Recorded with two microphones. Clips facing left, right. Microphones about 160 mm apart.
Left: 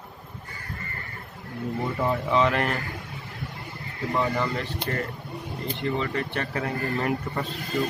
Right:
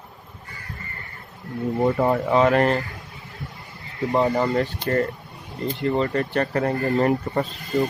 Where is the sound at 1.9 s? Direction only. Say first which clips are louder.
Right 5 dB; 55° right (ahead or behind); by 2.8 s 40° right (ahead or behind).